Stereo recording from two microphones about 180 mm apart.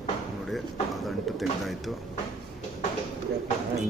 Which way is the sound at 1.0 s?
Centre (ahead or behind).